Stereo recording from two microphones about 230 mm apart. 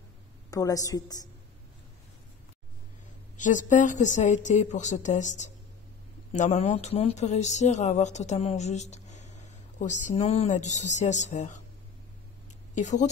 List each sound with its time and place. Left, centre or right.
0.5 s a woman's voice: centre
3.3 s a woman's voice: left
12.7 s a woman's voice: left